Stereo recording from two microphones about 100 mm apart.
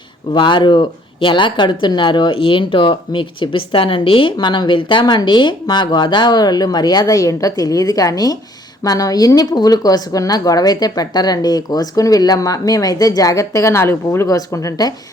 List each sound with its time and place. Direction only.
0.3 s speech: 50° left (ahead or behind)